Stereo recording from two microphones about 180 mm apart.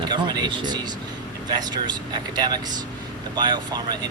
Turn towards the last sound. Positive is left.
turn(degrees=-25)  # may be behind; listen again after turning